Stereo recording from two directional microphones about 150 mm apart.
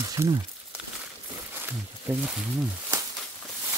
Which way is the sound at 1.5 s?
15° right (ahead or behind).